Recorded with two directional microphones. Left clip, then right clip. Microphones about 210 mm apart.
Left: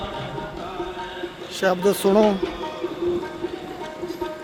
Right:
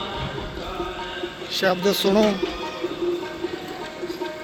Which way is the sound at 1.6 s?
20° left (ahead or behind).